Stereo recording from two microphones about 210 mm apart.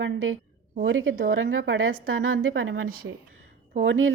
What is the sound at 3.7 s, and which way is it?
Speech, 65° right (ahead or behind).